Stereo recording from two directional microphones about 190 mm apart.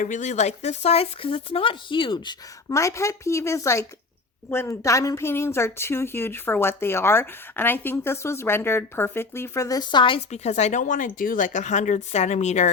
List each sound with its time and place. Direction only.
0.0 s a woman's voice: 40° left (ahead or behind)